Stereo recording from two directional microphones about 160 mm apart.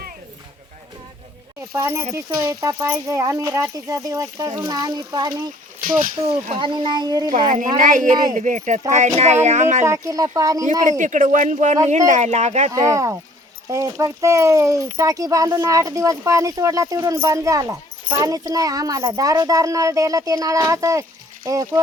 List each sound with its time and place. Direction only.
1.7 s speech: 15° right (ahead or behind)
7.3 s speech: 50° right (ahead or behind)
9.8 s speech: 20° right (ahead or behind)
10.7 s speech: 50° right (ahead or behind)
12.7 s speech: 20° right (ahead or behind)